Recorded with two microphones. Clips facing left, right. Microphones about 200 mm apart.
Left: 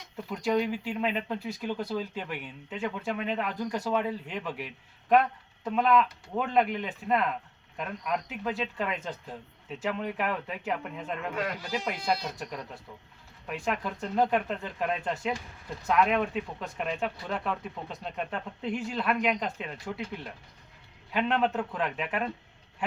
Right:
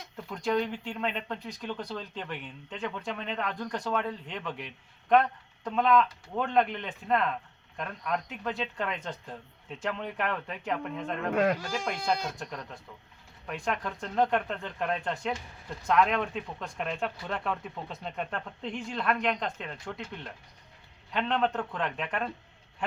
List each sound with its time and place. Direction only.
0.3 s speech: 5° left (ahead or behind)
11.4 s speech: 45° right (ahead or behind)
11.9 s speech: 5° left (ahead or behind)